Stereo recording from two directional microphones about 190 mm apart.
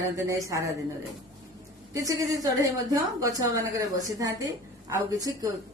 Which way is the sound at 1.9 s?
15° right (ahead or behind).